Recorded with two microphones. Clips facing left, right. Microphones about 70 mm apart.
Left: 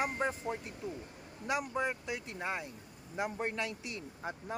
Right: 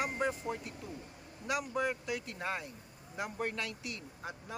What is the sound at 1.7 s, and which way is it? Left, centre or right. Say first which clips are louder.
Speech: right 1 dB; left.